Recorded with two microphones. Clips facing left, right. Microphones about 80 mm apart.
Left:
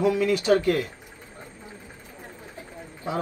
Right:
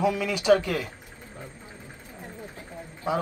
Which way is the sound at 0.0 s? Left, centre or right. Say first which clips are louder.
Left 3 dB; right.